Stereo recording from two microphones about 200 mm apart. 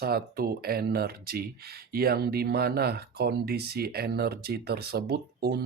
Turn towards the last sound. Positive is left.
turn(degrees=-50)  # may be behind; listen again after turning